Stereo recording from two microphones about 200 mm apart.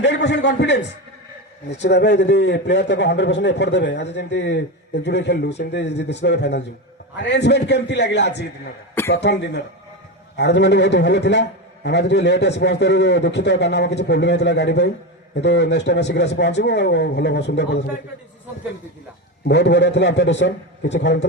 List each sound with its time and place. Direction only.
0.0 s a man's voice: 60° left (ahead or behind)
19.5 s a man's voice: 60° left (ahead or behind)